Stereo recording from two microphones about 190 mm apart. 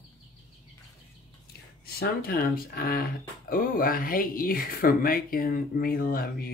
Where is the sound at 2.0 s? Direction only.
50° left (ahead or behind).